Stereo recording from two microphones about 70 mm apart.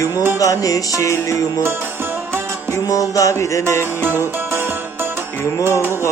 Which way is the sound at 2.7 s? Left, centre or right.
Left.